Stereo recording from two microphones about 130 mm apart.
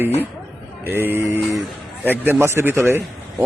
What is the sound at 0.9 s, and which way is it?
A man's voice, 15° right (ahead or behind).